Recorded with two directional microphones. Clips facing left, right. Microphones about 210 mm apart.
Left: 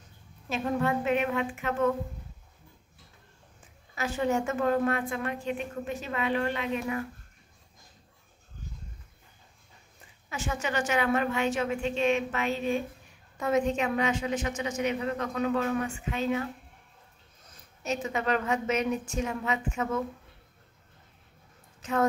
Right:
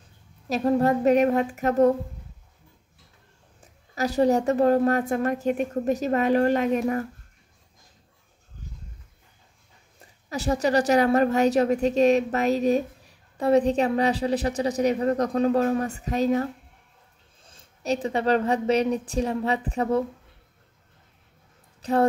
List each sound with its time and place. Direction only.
0.5 s a woman's voice: 40° right (ahead or behind)
3.6 s a woman's voice: 40° right (ahead or behind)
10.3 s a woman's voice: 35° right (ahead or behind)
17.4 s a woman's voice: 30° right (ahead or behind)
21.8 s a woman's voice: 35° right (ahead or behind)